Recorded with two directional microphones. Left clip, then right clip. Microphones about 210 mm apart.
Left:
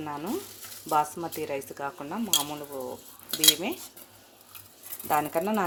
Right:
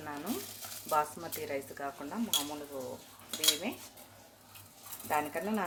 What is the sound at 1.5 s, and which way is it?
Speech, 35° left (ahead or behind).